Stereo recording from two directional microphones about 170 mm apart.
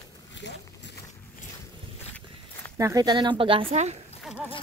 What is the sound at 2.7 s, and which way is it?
Speech, 20° right (ahead or behind).